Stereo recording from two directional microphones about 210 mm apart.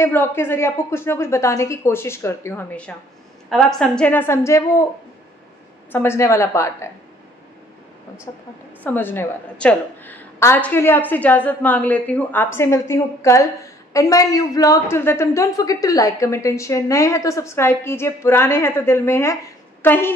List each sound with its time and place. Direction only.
0.0 s a woman's voice: 10° left (ahead or behind)
5.9 s a woman's voice: 10° left (ahead or behind)
8.3 s a woman's voice: 15° left (ahead or behind)